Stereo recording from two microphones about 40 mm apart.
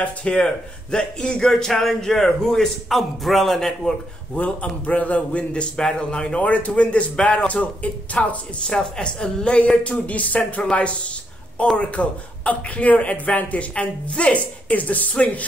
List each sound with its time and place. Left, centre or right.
0.0 s a man's voice: left
0.9 s a man's voice: left
4.4 s a man's voice: left
8.6 s a woman's voice: centre
9.9 s a man's voice: left